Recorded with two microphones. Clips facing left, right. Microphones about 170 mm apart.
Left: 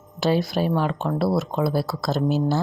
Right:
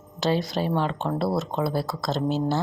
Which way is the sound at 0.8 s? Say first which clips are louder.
Left 2 dB; 10° left (ahead or behind).